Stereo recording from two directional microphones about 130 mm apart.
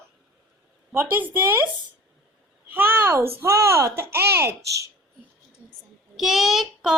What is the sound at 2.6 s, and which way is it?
A child's voice, 15° right (ahead or behind).